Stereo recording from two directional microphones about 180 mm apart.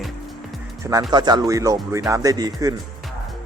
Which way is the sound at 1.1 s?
25° right (ahead or behind).